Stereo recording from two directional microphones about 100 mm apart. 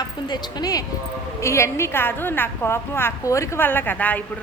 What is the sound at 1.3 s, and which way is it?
A woman's voice, 30° left (ahead or behind).